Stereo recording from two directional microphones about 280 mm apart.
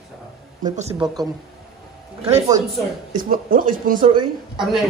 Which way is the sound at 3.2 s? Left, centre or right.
Right.